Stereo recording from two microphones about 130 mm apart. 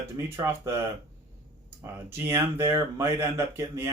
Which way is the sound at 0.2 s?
25° right (ahead or behind).